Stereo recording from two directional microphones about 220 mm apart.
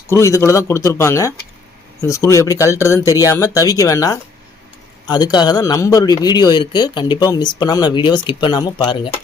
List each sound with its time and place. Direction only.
0.1 s a man's voice: 15° left (ahead or behind)